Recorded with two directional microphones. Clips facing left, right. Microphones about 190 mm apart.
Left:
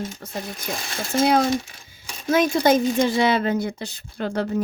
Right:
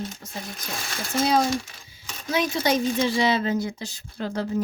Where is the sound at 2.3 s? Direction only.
50° left (ahead or behind).